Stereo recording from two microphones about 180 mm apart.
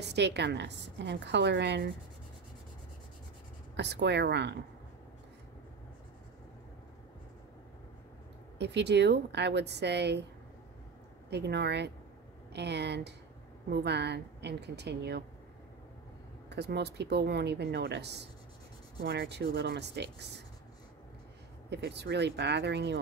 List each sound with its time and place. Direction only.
0.1 s a woman's voice: 70° right (ahead or behind)
3.7 s a woman's voice: 70° right (ahead or behind)
8.5 s a woman's voice: 70° right (ahead or behind)
11.2 s a woman's voice: 70° right (ahead or behind)
16.4 s a woman's voice: 65° right (ahead or behind)
21.6 s a woman's voice: 70° right (ahead or behind)